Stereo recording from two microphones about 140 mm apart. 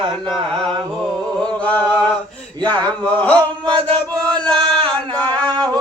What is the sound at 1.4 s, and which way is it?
Mantra, 10° left (ahead or behind).